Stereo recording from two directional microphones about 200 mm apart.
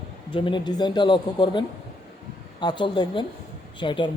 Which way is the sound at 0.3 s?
25° left (ahead or behind).